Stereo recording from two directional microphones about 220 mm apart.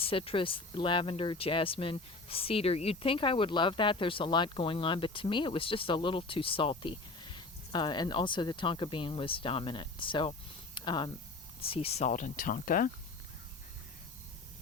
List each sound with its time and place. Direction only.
0.0 s speech: 25° left (ahead or behind)